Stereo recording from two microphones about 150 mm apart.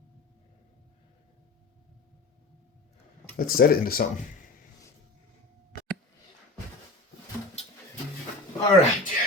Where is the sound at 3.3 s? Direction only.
80° left.